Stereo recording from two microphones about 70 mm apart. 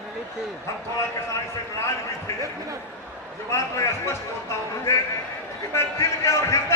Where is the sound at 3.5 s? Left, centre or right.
Left.